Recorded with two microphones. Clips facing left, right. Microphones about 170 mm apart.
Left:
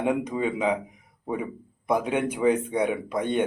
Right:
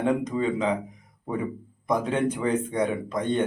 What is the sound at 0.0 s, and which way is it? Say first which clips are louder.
Speech: right 1 dB; 10° left (ahead or behind).